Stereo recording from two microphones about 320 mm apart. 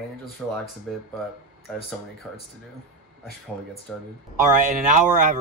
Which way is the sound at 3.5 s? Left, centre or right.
Centre.